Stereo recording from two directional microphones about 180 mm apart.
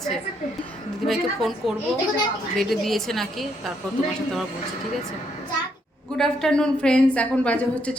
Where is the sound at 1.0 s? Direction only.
Centre (ahead or behind).